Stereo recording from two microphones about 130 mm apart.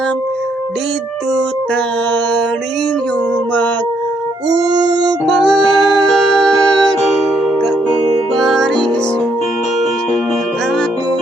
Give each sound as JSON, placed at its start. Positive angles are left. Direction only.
{"t": 4.4, "sound": "howl", "side_deg": -30}
{"t": 5.2, "sound": "music", "side_deg": 0}
{"t": 8.4, "sound": "music", "side_deg": 0}